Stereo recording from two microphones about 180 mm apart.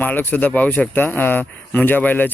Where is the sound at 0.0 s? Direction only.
10° left (ahead or behind).